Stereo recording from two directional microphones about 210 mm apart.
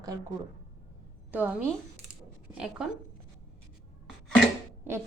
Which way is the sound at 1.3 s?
10° right (ahead or behind).